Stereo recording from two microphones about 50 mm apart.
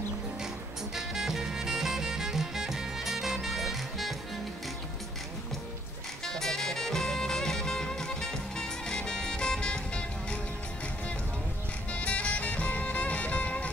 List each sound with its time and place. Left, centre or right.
0.9 s music: centre
6.2 s music: centre
11.9 s music: left